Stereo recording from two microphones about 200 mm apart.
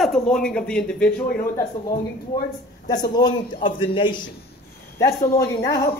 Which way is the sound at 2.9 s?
20° left (ahead or behind).